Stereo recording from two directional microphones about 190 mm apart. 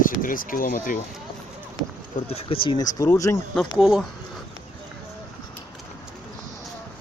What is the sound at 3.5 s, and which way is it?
Speech, centre (ahead or behind).